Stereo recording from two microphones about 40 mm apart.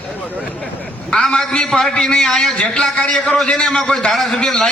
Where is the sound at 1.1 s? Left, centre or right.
Centre.